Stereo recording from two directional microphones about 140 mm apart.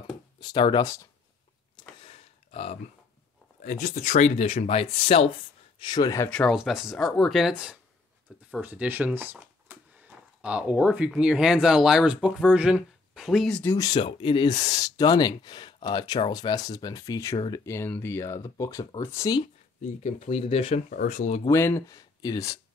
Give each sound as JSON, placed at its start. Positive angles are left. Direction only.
{"t": 0.4, "sound": "speech", "side_deg": 30}
{"t": 1.8, "sound": "a sound", "side_deg": 40}
{"t": 3.6, "sound": "speech", "side_deg": 65}
{"t": 5.8, "sound": "speech", "side_deg": 30}
{"t": 6.2, "sound": "speech", "side_deg": 10}
{"t": 6.5, "sound": "speech", "side_deg": -5}
{"t": 13.7, "sound": "speech", "side_deg": 30}
{"t": 14.7, "sound": "speech", "side_deg": 25}
{"t": 19.4, "sound": "speech", "side_deg": 55}
{"t": 20.9, "sound": "speech", "side_deg": 70}
{"t": 21.5, "sound": "speech", "side_deg": 20}